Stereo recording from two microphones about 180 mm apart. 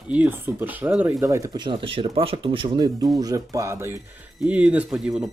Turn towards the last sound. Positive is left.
turn(degrees=-5)  # may be behind; listen again after turning